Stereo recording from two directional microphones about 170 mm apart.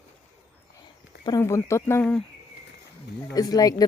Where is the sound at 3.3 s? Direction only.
20° left (ahead or behind).